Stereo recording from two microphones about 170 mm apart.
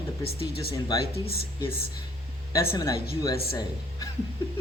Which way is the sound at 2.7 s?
20° left (ahead or behind).